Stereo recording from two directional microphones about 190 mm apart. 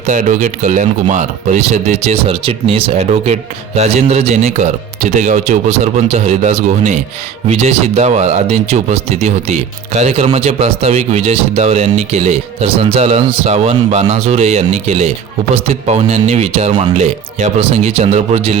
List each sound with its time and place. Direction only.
0.0 s speech: 40° right (ahead or behind)